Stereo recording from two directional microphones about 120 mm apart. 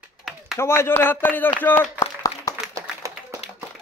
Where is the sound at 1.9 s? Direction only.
30° left (ahead or behind).